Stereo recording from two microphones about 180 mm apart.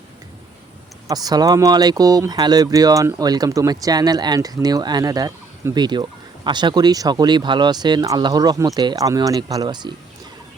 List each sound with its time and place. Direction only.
1.0 s speech: 20° right (ahead or behind)